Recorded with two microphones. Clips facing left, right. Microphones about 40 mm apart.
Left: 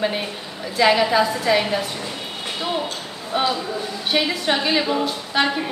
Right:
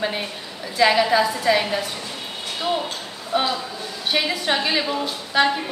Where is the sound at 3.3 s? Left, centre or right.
Centre.